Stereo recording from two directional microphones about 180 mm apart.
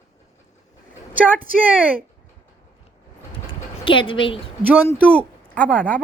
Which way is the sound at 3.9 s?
30° left (ahead or behind).